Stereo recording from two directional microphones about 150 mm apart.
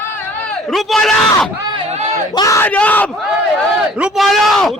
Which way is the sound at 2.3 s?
25° left (ahead or behind).